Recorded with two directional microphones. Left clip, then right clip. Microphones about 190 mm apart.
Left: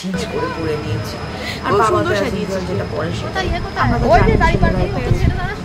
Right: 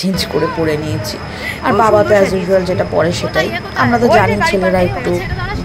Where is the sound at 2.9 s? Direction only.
45° right (ahead or behind).